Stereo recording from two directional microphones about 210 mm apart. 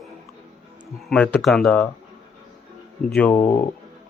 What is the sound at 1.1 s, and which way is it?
Speech, 5° left (ahead or behind).